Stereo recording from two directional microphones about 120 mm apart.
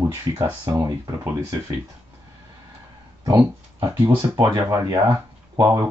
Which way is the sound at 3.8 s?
20° right (ahead or behind).